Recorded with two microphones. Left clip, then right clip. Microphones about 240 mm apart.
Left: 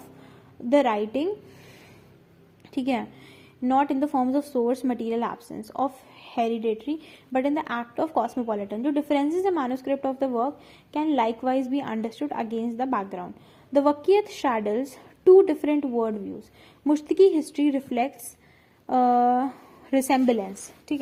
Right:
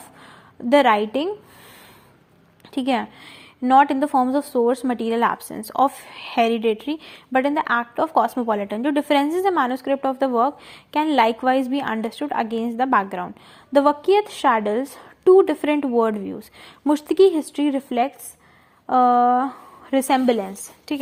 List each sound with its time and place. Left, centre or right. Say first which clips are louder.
0.7 s a woman's voice: right 6 dB; right
2.7 s a woman's voice: right 5 dB; centre